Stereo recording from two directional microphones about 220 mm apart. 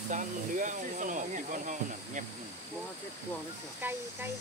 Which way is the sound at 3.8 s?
10° right (ahead or behind).